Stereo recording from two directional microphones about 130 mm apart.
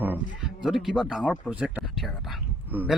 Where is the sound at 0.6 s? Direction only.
Centre (ahead or behind).